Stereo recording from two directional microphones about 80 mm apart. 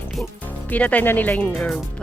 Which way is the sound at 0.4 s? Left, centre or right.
Centre.